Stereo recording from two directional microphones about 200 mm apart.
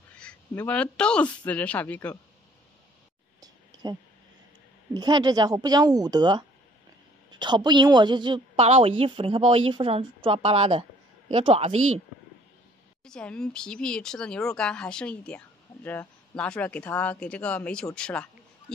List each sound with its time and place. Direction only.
0.2 s speech: 5° left (ahead or behind)
3.8 s a woman's voice: 20° right (ahead or behind)
13.0 s speech: 5° left (ahead or behind)